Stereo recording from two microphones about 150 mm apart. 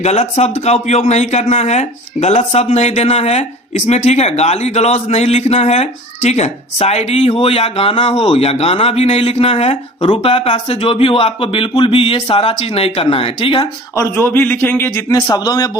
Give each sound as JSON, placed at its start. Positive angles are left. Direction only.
{"t": 0.0, "sound": "speech", "side_deg": 45}
{"t": 13.9, "sound": "a man's voice", "side_deg": 20}